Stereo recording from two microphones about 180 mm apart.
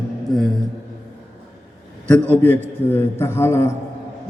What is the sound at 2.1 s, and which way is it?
A man's voice, 10° left (ahead or behind).